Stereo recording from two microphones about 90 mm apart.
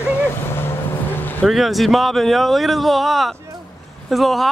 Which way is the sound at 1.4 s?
Centre (ahead or behind).